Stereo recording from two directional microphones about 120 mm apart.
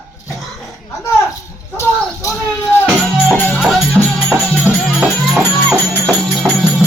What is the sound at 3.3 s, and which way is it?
Music, 15° left (ahead or behind).